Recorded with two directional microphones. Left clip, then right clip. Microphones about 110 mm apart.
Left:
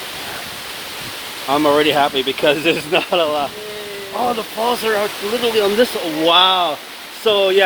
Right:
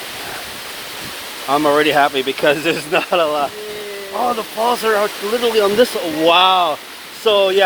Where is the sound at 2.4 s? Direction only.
35° left (ahead or behind).